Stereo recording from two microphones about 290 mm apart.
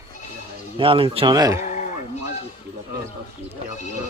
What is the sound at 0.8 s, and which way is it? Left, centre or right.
Speech, centre.